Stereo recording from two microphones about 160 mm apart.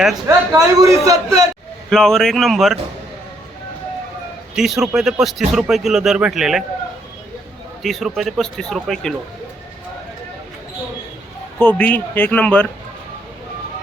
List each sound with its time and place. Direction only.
0.3 s a man's voice: 20° right (ahead or behind)
1.9 s speech: centre (ahead or behind)
4.5 s speech: centre (ahead or behind)
7.8 s speech: centre (ahead or behind)
11.6 s a man's voice: 10° left (ahead or behind)